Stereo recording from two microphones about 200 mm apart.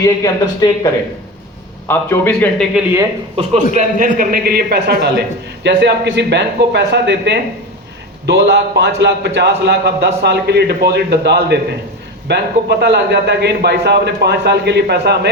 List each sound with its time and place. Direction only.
0.0 s speech: 15° left (ahead or behind)
1.9 s speech: 10° left (ahead or behind)
2.7 s speech: 15° right (ahead or behind)
3.8 s a man's voice: 45° right (ahead or behind)